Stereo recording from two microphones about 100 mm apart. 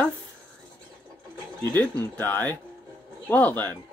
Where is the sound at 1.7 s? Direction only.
20° left (ahead or behind).